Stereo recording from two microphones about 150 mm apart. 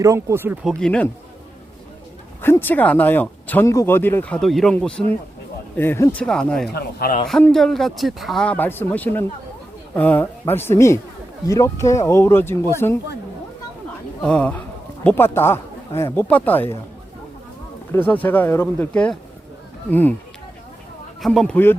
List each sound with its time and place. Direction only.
0.0 s speech: 20° right (ahead or behind)
0.6 s speech: 5° left (ahead or behind)
2.4 s speech: 15° left (ahead or behind)
6.7 s a man's voice: 90° left
7.3 s speech: 5° left (ahead or behind)
14.2 s speech: 5° left (ahead or behind)
17.9 s speech: 10° left (ahead or behind)
21.2 s speech: centre (ahead or behind)